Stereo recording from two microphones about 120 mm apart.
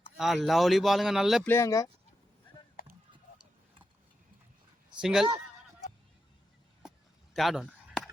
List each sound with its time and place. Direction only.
0.2 s speech: centre (ahead or behind)
1.5 s speech: 25° left (ahead or behind)
4.9 s speech: 5° right (ahead or behind)
7.3 s a sound: centre (ahead or behind)